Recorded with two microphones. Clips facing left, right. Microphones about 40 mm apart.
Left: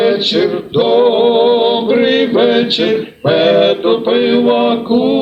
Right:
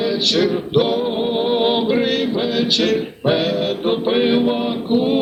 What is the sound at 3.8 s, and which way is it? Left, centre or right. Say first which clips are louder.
Music: left 6 dB; left.